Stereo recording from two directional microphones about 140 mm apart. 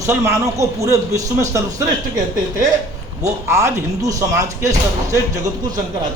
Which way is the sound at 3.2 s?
20° right (ahead or behind).